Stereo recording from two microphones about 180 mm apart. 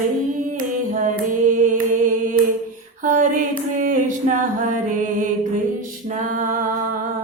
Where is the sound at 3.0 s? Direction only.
45° right (ahead or behind).